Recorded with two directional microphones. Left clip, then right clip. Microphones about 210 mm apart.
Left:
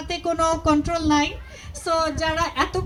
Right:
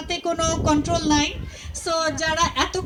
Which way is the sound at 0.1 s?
40° right (ahead or behind).